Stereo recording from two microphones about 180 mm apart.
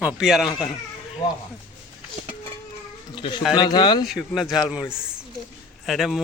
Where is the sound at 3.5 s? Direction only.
25° left (ahead or behind).